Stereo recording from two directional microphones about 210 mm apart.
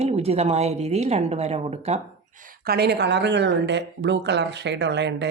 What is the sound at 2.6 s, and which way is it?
Speech, 50° right (ahead or behind).